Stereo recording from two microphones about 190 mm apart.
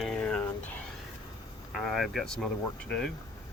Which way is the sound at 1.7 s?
Centre (ahead or behind).